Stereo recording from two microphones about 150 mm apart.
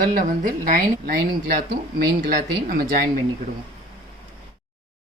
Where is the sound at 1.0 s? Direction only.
90° right.